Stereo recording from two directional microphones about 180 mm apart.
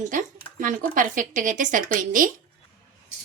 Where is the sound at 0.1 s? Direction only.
45° right (ahead or behind).